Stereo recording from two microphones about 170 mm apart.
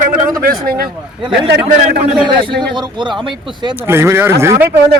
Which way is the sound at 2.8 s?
25° right (ahead or behind).